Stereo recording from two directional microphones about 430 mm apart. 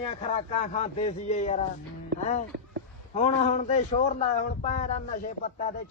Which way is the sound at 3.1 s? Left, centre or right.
Centre.